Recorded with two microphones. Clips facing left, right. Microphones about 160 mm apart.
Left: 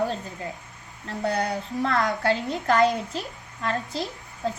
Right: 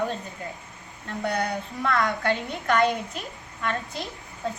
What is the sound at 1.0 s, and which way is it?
A woman's voice, 35° left (ahead or behind).